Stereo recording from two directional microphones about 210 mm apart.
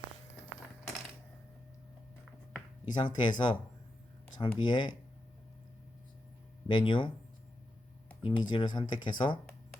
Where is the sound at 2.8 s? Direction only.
20° left (ahead or behind).